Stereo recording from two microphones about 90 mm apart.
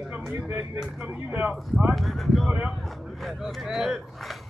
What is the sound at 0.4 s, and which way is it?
Speech, 20° right (ahead or behind).